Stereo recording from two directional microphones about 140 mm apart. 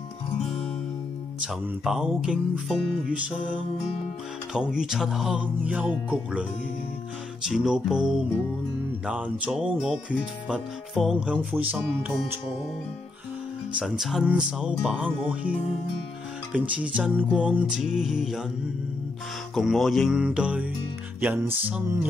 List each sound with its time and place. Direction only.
1.4 s speech: 5° right (ahead or behind)
7.4 s speech: 5° right (ahead or behind)
13.7 s speech: centre (ahead or behind)
16.5 s speech: 10° right (ahead or behind)
19.5 s speech: centre (ahead or behind); by 22.0 s 15° right (ahead or behind)